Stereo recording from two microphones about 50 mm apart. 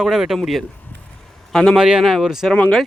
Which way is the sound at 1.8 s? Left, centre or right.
Centre.